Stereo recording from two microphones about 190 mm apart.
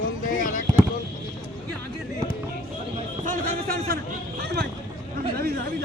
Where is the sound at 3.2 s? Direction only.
45° right (ahead or behind).